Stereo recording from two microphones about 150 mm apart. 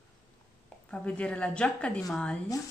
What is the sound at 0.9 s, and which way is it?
A woman's voice, 10° left (ahead or behind).